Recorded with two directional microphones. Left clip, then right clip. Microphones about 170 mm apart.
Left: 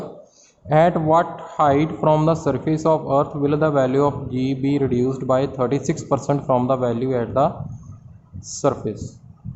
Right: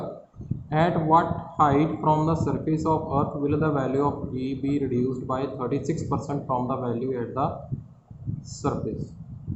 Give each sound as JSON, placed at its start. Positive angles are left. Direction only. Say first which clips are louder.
{"t": 0.7, "sound": "speech", "louder": "left 5 dB", "side_deg": 55}